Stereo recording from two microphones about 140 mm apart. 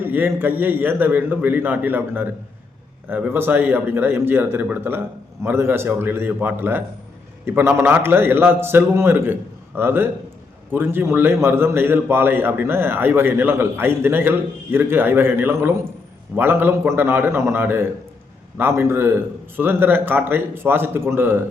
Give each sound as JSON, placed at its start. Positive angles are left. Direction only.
{"t": 0.0, "sound": "a man's voice", "side_deg": -15}